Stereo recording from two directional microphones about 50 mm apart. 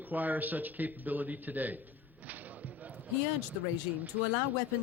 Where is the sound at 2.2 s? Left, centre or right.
Right.